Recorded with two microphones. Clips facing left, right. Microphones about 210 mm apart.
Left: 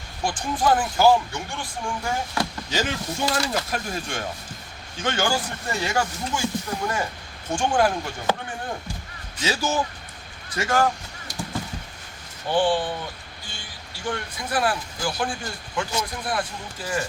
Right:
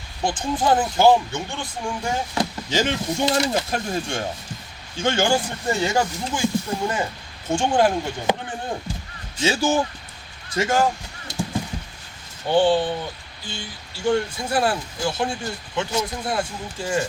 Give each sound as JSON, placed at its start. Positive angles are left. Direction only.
{"t": 0.2, "sound": "speech", "side_deg": -25}
{"t": 9.4, "sound": "speech", "side_deg": -25}
{"t": 12.5, "sound": "speech", "side_deg": -25}
{"t": 14.0, "sound": "speech", "side_deg": -25}